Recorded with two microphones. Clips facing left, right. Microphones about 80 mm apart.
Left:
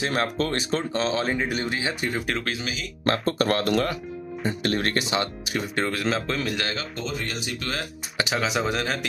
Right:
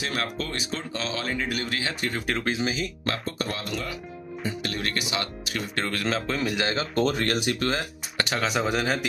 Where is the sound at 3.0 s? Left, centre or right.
Left.